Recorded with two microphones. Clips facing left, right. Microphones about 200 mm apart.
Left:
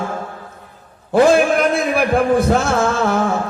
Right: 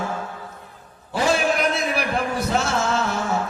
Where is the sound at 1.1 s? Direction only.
50° left (ahead or behind).